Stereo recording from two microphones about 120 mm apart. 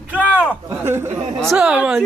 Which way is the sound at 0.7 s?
20° right (ahead or behind).